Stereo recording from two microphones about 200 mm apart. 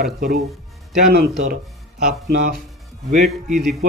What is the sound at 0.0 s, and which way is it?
Speech, 50° right (ahead or behind).